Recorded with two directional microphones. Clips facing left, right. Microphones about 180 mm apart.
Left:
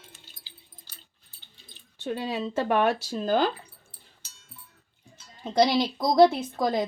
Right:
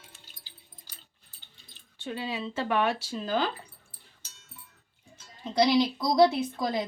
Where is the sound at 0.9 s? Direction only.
15° right (ahead or behind).